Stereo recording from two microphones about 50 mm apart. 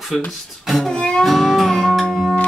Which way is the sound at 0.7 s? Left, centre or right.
Centre.